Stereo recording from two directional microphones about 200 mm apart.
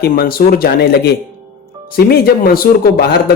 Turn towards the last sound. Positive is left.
turn(degrees=50)  # may be behind; listen again after turning